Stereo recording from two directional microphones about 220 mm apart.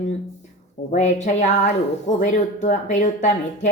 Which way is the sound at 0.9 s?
30° left (ahead or behind).